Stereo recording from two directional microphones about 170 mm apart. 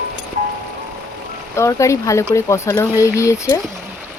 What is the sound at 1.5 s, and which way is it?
Speech, 15° left (ahead or behind).